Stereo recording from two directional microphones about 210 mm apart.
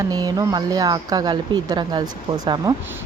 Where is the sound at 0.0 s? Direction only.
20° right (ahead or behind).